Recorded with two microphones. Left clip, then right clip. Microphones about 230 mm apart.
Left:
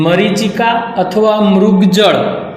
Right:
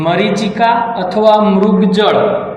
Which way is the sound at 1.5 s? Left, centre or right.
Left.